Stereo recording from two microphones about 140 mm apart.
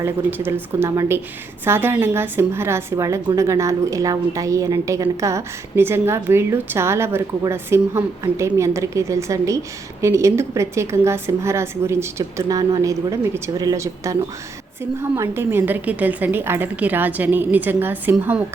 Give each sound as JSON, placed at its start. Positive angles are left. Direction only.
{"t": 0.0, "sound": "a woman's voice", "side_deg": -15}